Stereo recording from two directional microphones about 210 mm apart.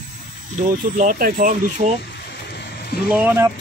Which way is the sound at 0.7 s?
40° right (ahead or behind).